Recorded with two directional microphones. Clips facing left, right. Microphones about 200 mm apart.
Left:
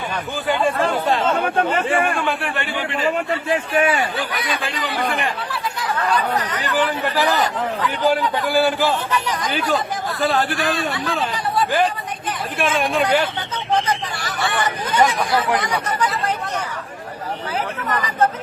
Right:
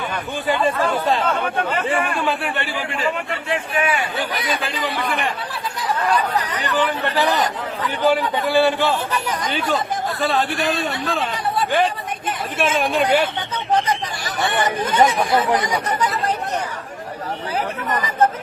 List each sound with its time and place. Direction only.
0.4 s a man's voice: centre (ahead or behind)
2.0 s a man's voice: centre (ahead or behind)
3.8 s a man's voice: 45° left (ahead or behind)
4.2 s a man's voice: centre (ahead or behind)
6.7 s a man's voice: centre (ahead or behind)
12.5 s a man's voice: centre (ahead or behind)
14.2 s hubbub: 20° right (ahead or behind)
15.2 s speech: 20° right (ahead or behind)